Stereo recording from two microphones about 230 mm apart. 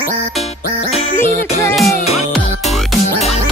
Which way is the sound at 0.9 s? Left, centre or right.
Left.